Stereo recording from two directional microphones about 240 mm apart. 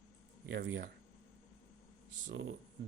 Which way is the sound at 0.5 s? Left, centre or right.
Right.